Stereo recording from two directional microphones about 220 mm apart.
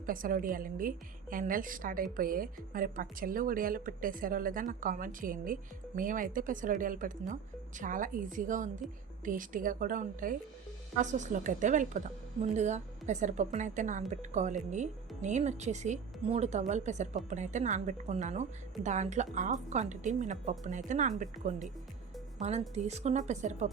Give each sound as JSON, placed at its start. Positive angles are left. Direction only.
{"t": 0.0, "sound": "a woman's voice", "side_deg": -40}